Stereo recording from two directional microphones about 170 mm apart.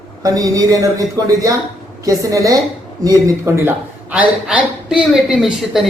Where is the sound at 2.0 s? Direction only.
20° right (ahead or behind).